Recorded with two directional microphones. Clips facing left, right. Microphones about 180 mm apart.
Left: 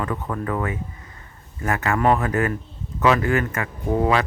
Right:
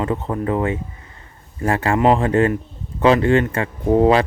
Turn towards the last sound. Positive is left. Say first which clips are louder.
# right 6 dB
turn(degrees=-25)  # may be behind; listen again after turning